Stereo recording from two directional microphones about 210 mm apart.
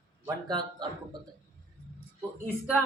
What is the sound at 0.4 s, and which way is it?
Speech, 20° right (ahead or behind).